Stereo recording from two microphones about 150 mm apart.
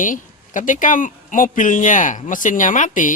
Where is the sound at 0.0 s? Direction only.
60° left (ahead or behind).